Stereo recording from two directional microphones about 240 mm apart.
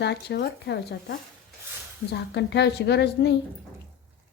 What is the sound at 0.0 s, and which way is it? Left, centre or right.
A woman's voice, left.